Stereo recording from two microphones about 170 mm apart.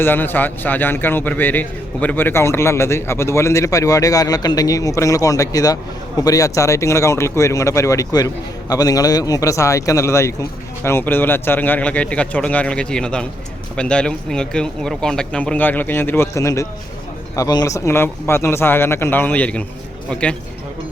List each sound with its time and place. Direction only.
0.0 s a man's voice: 10° left (ahead or behind)